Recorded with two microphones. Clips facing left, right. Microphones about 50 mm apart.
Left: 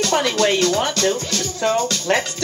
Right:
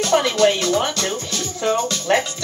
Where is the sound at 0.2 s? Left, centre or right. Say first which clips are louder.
Right 1 dB; left.